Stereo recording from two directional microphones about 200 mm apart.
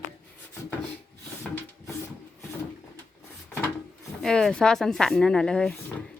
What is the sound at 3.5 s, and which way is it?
Speech, 5° left (ahead or behind).